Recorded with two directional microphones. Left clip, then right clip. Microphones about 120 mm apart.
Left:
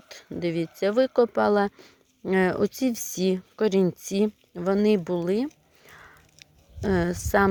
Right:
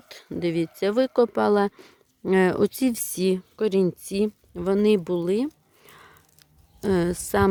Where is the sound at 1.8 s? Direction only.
55° right (ahead or behind).